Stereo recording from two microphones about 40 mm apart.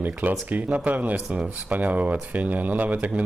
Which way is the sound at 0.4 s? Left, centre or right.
Right.